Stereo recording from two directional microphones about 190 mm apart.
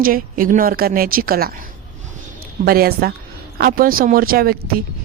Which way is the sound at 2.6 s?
50° right (ahead or behind).